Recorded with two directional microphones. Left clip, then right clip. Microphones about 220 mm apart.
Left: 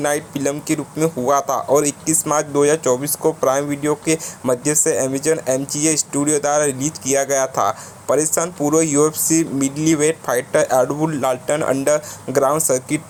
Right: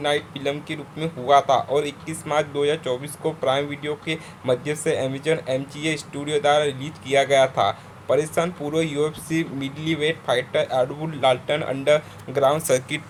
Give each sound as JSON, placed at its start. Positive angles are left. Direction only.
{"t": 0.0, "sound": "speech", "side_deg": 30}